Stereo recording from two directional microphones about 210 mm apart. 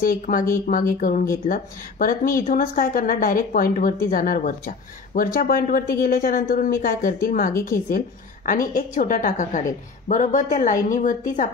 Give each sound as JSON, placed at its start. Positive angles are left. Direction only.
{"t": 0.0, "sound": "a woman's voice", "side_deg": 40}